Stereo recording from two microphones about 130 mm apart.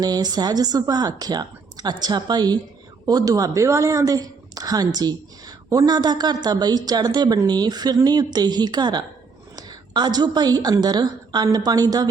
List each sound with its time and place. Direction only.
0.0 s a woman's voice: 30° right (ahead or behind)